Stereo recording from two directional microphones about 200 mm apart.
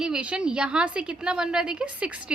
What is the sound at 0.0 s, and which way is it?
A woman's voice, 5° right (ahead or behind).